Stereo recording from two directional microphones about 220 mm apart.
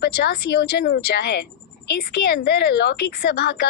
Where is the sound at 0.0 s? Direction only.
45° left (ahead or behind).